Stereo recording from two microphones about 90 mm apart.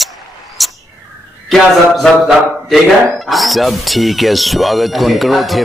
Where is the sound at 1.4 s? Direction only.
Centre (ahead or behind).